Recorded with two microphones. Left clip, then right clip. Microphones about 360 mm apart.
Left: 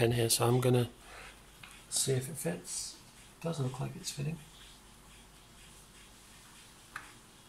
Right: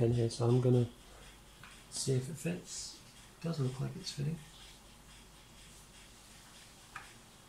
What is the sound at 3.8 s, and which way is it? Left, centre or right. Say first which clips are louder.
Speech: left 2 dB; left.